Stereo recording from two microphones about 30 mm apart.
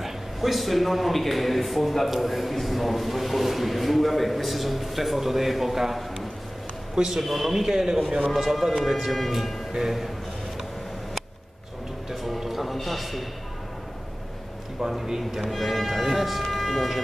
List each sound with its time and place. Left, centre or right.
0.0 s a man's voice: centre
7.2 s a man's voice: centre
7.5 s a man's voice: centre
8.4 s a man's voice: centre
9.7 s speech: centre
12.1 s music: centre
12.7 s a man's voice: centre
15.0 s speech: centre
15.5 s a man's voice: centre